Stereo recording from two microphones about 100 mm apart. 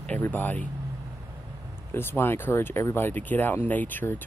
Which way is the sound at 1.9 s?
25° left (ahead or behind).